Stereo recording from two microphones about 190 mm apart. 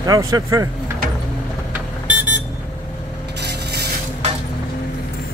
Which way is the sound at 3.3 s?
60° right (ahead or behind).